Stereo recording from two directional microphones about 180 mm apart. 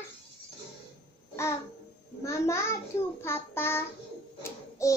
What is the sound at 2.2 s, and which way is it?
Child singing, 15° left (ahead or behind).